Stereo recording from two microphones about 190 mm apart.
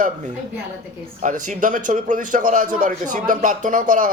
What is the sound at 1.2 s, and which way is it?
A man's voice, 45° right (ahead or behind).